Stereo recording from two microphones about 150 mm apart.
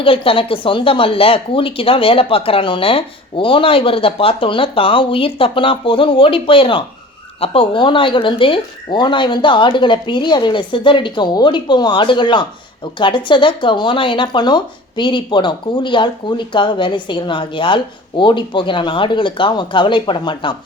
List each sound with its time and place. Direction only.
0.0 s speech: 35° left (ahead or behind)